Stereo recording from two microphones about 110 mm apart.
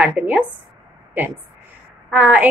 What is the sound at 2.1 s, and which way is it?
Speech, 15° right (ahead or behind).